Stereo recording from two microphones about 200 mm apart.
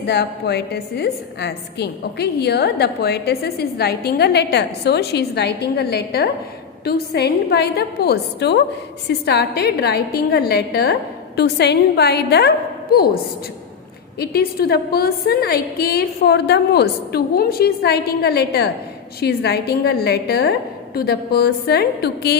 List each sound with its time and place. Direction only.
0.0 s a woman's voice: 55° left (ahead or behind)
14.2 s a woman's voice: 50° left (ahead or behind)